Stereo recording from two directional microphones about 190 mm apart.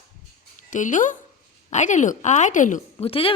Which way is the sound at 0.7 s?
40° left (ahead or behind).